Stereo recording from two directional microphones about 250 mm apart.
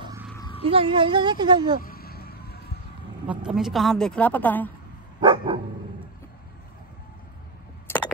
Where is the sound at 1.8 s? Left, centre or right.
Left.